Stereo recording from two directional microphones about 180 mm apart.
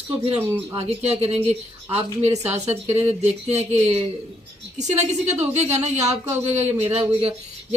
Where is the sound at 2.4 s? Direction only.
35° right (ahead or behind).